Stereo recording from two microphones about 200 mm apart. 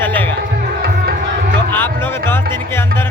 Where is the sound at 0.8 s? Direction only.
50° right (ahead or behind).